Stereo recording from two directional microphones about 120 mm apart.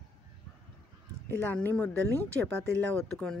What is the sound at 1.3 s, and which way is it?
Speech, 15° left (ahead or behind).